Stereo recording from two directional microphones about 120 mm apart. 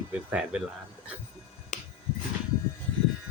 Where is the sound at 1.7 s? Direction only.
85° left.